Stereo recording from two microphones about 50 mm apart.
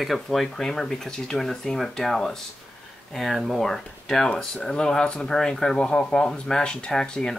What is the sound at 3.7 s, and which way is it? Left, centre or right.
Speech, centre.